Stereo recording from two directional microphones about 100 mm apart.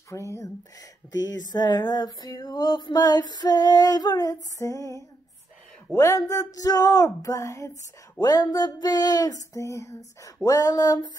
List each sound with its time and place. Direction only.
0.1 s speech: 30° left (ahead or behind)
8.2 s speech: 40° left (ahead or behind)